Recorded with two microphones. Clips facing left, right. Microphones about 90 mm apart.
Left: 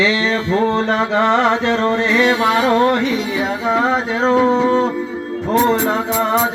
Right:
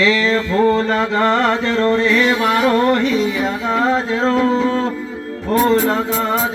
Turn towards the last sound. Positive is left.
turn(degrees=20)  # may be behind; listen again after turning